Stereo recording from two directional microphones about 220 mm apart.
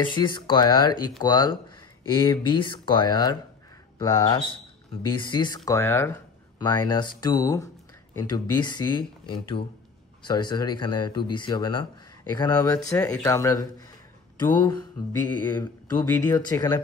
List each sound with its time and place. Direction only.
0.0 s speech: 20° left (ahead or behind)
15.4 s speech: 15° left (ahead or behind)